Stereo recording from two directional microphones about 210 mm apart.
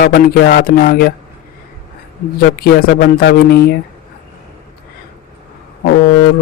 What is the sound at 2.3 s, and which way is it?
Speech, 50° left (ahead or behind).